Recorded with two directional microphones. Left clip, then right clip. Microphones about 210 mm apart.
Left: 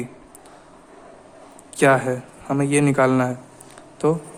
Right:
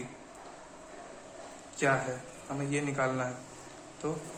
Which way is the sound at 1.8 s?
55° left (ahead or behind).